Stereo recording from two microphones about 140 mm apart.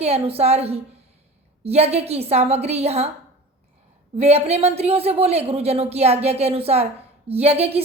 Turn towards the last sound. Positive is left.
turn(degrees=-45)  # may be behind; listen again after turning